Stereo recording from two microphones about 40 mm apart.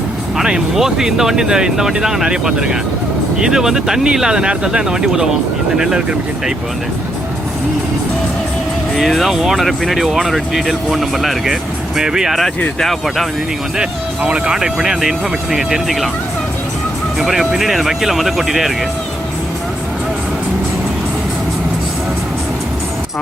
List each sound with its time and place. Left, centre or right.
0.3 s speech: centre
9.0 s speech: centre
11.9 s speech: centre
12.8 s speech: centre
14.2 s speech: right; by 16.0 s centre
17.2 s speech: centre